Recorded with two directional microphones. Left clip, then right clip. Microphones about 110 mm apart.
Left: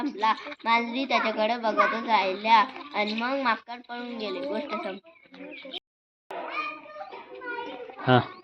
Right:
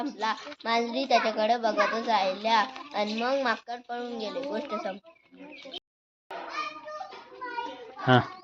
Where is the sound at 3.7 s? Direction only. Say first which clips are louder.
Right 2 dB; 20° right (ahead or behind).